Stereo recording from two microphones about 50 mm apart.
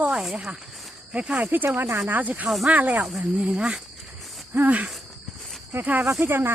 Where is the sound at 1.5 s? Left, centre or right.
Right; by 3.8 s centre.